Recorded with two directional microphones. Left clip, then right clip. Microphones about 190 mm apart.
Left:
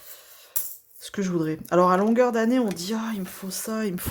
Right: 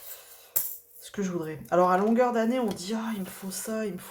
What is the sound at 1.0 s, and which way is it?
Speech, 45° left (ahead or behind).